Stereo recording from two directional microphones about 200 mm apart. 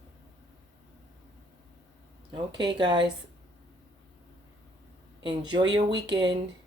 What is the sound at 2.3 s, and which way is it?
Speech, 25° right (ahead or behind).